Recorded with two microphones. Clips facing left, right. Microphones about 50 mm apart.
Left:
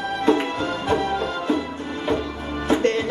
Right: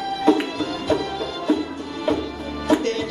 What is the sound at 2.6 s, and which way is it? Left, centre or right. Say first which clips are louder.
Music: even; left.